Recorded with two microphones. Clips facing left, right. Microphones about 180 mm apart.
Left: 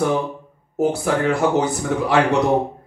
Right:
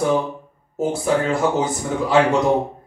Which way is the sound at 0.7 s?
65° left (ahead or behind).